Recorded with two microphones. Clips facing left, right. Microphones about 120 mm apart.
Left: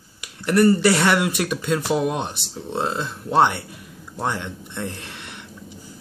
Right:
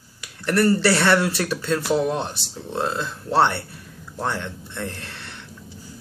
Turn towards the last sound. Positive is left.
turn(degrees=15)  # may be behind; listen again after turning